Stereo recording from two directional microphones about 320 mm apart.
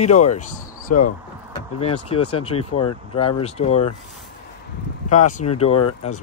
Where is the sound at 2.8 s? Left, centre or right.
Centre.